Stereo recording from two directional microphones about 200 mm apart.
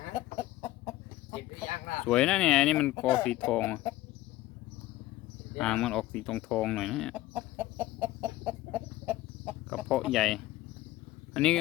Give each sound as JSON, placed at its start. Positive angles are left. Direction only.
{"t": 0.1, "sound": "chicken", "side_deg": 15}
{"t": 1.7, "sound": "speech", "side_deg": 40}
{"t": 2.0, "sound": "speech", "side_deg": 5}
{"t": 5.5, "sound": "speech", "side_deg": 5}
{"t": 7.3, "sound": "chicken", "side_deg": -10}
{"t": 11.3, "sound": "speech", "side_deg": 5}